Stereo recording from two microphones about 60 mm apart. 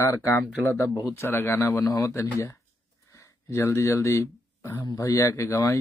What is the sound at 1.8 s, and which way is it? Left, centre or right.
Speech, left.